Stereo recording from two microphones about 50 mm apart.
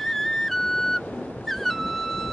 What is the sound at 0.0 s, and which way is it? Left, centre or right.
Flute, centre.